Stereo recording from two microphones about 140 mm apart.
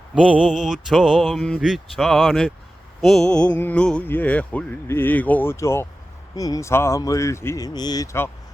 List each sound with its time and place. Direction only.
0.3 s mantra: 5° right (ahead or behind)
3.6 s speech: 10° left (ahead or behind)